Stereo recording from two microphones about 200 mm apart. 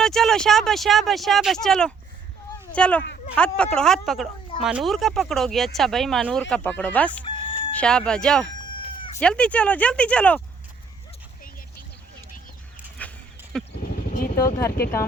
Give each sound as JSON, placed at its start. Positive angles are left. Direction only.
{"t": 0.0, "sound": "speech", "side_deg": 0}
{"t": 8.6, "sound": "cat", "side_deg": 25}
{"t": 9.1, "sound": "speech", "side_deg": 5}
{"t": 13.0, "sound": "a sound", "side_deg": 5}
{"t": 13.5, "sound": "wild animals", "side_deg": 5}
{"t": 14.3, "sound": "speech", "side_deg": 15}